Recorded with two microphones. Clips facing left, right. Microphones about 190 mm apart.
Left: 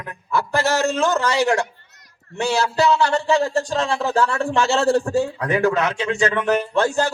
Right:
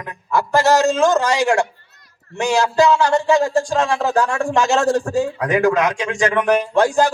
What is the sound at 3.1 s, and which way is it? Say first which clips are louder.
Speech: right 3 dB; 15° right (ahead or behind).